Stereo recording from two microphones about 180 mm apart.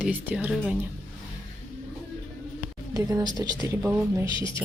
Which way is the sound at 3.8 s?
10° right (ahead or behind).